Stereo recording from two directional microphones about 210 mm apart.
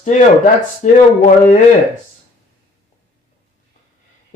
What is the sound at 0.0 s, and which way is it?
Speech, 35° left (ahead or behind).